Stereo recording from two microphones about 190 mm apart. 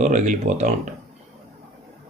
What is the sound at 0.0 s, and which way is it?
Speech, 40° right (ahead or behind).